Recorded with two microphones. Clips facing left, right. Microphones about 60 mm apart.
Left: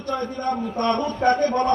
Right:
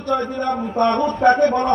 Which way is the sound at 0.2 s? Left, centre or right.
Right.